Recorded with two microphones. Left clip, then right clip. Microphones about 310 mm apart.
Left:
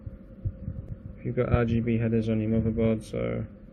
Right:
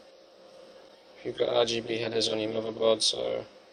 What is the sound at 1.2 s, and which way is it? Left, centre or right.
A man's voice, centre.